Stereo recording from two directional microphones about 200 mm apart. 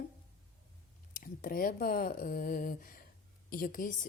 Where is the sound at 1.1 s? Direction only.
45° left (ahead or behind).